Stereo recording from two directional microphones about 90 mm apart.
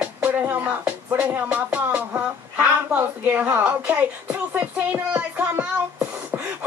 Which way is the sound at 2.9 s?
20° right (ahead or behind).